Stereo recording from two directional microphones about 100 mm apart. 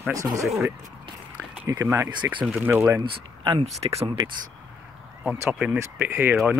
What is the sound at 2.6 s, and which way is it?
Speech, 20° right (ahead or behind).